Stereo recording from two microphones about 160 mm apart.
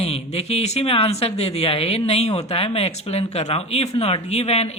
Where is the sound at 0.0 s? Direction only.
40° left (ahead or behind).